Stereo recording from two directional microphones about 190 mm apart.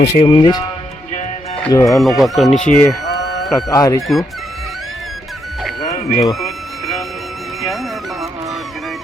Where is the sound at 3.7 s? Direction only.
20° left (ahead or behind).